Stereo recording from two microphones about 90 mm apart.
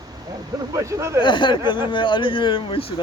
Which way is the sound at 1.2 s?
65° left (ahead or behind).